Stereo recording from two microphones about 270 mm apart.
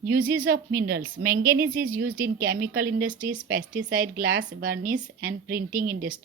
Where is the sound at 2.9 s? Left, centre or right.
Centre.